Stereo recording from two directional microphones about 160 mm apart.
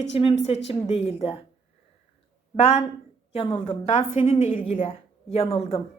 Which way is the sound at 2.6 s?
40° left (ahead or behind).